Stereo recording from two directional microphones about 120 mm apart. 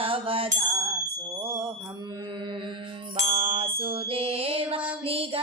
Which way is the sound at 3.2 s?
50° right (ahead or behind).